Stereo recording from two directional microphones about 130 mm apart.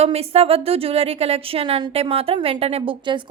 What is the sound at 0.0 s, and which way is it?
A woman's voice, 50° right (ahead or behind).